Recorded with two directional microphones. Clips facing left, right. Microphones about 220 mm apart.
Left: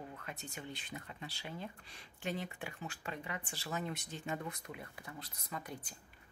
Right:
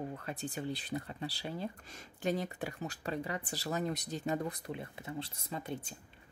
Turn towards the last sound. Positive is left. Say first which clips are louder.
# right 5 dB
turn(degrees=-25)  # may be behind; listen again after turning